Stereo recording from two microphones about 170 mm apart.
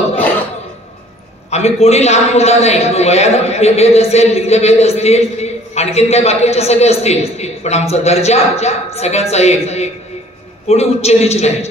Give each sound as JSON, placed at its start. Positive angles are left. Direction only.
{"t": 1.5, "sound": "a man's voice", "side_deg": 40}